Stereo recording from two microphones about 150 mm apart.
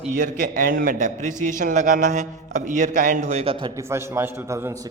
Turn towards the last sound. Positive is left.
turn(degrees=-15)  # may be behind; listen again after turning